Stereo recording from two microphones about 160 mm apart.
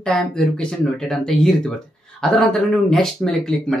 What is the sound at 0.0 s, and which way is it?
Speech, 5° left (ahead or behind).